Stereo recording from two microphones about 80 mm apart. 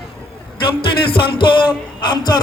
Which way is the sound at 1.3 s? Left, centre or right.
Left.